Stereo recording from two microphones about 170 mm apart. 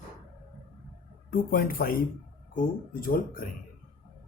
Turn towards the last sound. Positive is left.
turn(degrees=55)  # may be behind; listen again after turning